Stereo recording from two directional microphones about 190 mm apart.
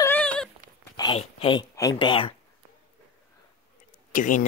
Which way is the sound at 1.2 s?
30° left (ahead or behind).